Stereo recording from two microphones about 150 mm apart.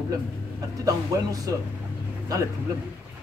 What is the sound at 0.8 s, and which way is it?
Speech, 25° right (ahead or behind).